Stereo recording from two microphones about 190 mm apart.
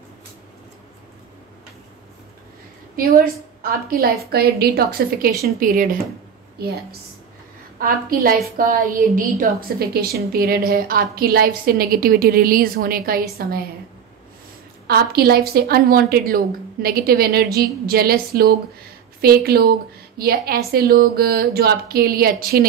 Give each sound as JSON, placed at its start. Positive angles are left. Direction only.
{"t": 3.0, "sound": "a woman's voice", "side_deg": -50}
{"t": 14.9, "sound": "a woman's voice", "side_deg": -55}